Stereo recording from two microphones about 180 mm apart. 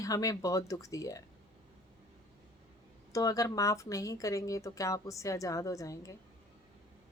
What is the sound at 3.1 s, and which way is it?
Speech, 20° left (ahead or behind).